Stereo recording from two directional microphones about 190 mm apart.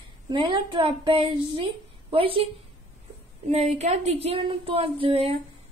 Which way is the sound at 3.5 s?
35° right (ahead or behind).